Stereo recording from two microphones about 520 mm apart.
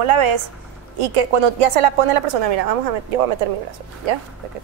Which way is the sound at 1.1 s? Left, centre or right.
Right.